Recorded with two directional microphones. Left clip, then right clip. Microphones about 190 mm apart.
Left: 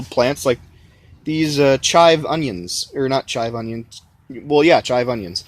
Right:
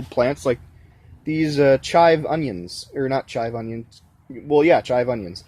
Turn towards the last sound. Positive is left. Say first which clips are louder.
# left 2 dB
turn(degrees=15)  # may be behind; listen again after turning